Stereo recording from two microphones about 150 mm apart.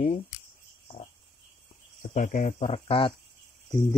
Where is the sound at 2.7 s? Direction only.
35° left (ahead or behind).